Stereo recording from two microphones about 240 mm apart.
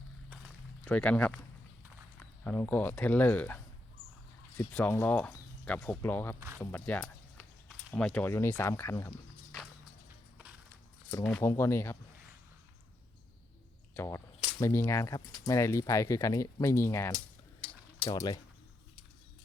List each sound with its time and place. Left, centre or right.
0.9 s speech: centre
11.2 s speech: centre
13.9 s speech: centre
17.6 s a sound: centre